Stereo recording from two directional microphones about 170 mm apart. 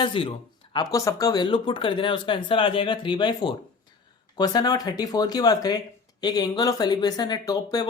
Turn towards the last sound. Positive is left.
turn(degrees=25)  # may be behind; listen again after turning